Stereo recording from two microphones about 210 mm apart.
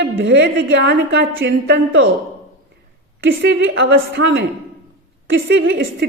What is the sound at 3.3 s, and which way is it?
A woman's voice, 60° right (ahead or behind).